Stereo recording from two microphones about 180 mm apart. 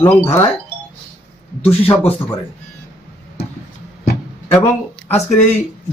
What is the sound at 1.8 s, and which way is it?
Speech, 30° left (ahead or behind).